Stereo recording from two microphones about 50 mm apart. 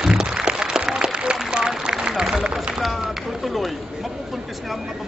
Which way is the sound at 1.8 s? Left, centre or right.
Centre.